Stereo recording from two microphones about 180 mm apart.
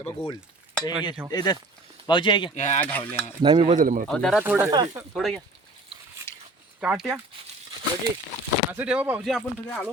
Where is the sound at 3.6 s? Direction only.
45° right (ahead or behind).